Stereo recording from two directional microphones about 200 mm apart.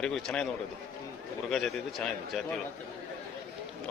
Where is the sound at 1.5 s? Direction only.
Centre (ahead or behind).